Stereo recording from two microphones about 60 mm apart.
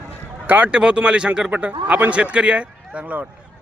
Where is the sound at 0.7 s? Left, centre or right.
Centre.